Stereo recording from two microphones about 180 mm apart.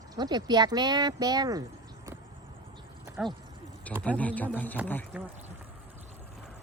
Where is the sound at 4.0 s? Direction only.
10° left (ahead or behind).